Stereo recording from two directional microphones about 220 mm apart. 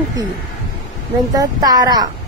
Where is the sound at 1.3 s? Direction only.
15° right (ahead or behind).